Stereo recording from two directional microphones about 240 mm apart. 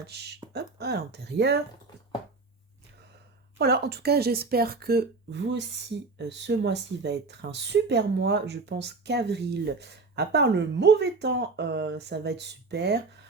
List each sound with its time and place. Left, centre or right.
0.1 s speech: right
3.6 s speech: right